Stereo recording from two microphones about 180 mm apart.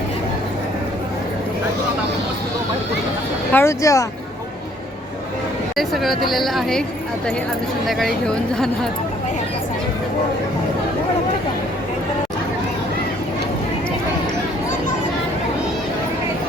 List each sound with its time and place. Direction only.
3.5 s speech: 15° left (ahead or behind)
5.7 s speech: centre (ahead or behind)
7.9 s speech: centre (ahead or behind)